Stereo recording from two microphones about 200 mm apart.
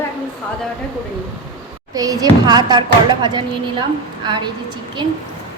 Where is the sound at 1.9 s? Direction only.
20° right (ahead or behind).